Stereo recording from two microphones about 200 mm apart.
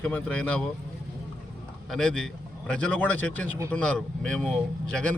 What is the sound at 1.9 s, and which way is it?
A man's voice, 5° left (ahead or behind).